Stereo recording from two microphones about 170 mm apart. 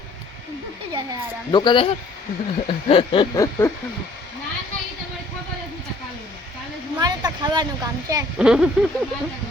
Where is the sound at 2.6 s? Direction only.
35° left (ahead or behind).